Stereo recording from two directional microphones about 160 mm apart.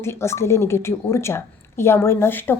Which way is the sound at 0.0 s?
15° left (ahead or behind).